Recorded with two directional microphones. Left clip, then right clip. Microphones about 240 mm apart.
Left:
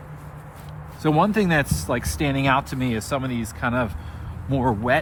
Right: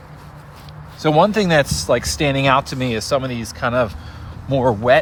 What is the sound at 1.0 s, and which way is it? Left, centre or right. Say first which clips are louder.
Speech: right 5 dB; right.